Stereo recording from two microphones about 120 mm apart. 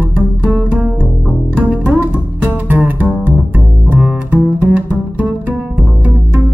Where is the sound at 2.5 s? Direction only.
15° right (ahead or behind).